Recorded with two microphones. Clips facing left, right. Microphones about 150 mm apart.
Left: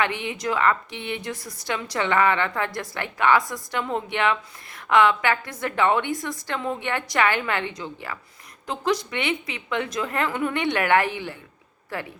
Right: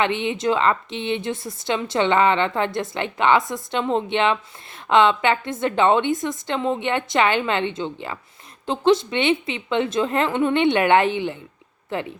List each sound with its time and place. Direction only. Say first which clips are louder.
0.0 s a woman's voice: right 5 dB; 25° right (ahead or behind)